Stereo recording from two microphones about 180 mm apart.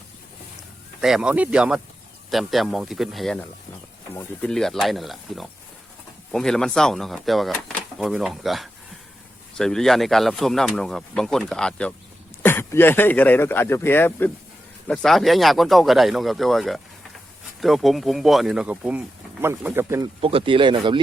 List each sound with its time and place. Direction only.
1.0 s speech: 5° right (ahead or behind)
20.2 s speech: 30° right (ahead or behind)